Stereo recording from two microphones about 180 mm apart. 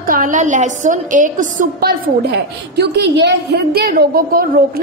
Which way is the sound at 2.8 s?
70° right (ahead or behind).